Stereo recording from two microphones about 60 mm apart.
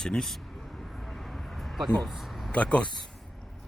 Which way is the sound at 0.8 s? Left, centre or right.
Centre.